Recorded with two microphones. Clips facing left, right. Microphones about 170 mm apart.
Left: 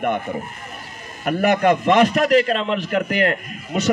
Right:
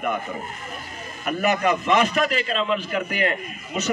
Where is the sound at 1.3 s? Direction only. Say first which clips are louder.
Left 5 dB; 65° left (ahead or behind).